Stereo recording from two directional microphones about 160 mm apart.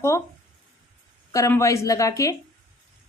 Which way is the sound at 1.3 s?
20° left (ahead or behind).